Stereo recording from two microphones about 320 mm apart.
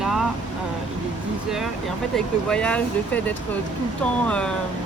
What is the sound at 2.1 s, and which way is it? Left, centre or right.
Speech, centre.